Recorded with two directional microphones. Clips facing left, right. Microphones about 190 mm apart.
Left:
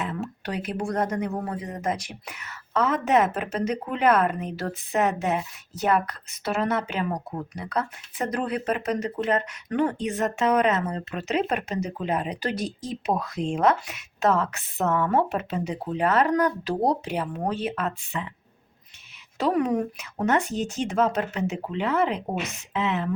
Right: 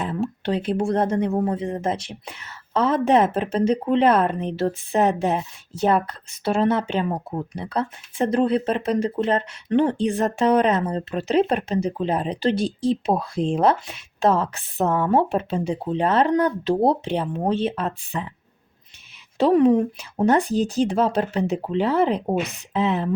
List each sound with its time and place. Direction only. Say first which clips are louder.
0.0 s speech: right 6 dB; 30° right (ahead or behind)
19.4 s speech: right 7 dB; 30° right (ahead or behind)